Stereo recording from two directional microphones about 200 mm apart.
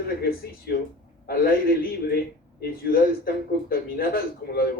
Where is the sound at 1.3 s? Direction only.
50° left (ahead or behind).